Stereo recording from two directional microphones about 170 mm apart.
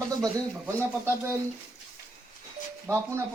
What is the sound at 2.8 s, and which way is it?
Speech, 15° right (ahead or behind).